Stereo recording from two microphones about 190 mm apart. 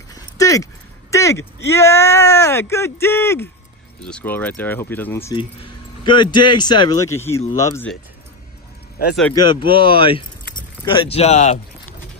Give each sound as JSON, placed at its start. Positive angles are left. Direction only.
{"t": 0.1, "sound": "a sound", "side_deg": 15}
{"t": 1.1, "sound": "speech", "side_deg": 15}
{"t": 5.3, "sound": "speech", "side_deg": 25}
{"t": 9.3, "sound": "speech", "side_deg": 20}